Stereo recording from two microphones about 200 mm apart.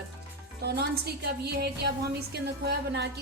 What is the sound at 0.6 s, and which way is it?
A woman's voice, 55° right (ahead or behind).